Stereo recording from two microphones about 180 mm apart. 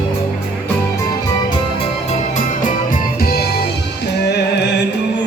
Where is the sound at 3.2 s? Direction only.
60° left (ahead or behind).